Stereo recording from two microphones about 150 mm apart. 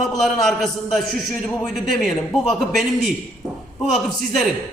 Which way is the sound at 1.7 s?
Centre (ahead or behind).